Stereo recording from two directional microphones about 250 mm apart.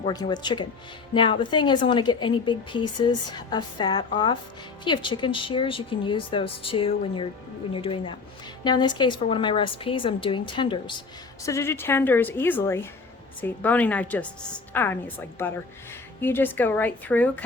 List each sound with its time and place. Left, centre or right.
0.0 s a woman's voice: centre